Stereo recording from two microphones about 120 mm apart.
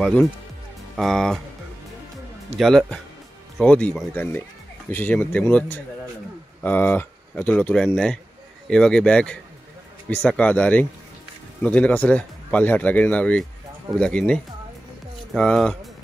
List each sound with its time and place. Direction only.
0.0 s speech: 10° left (ahead or behind)
2.6 s speech: 5° left (ahead or behind)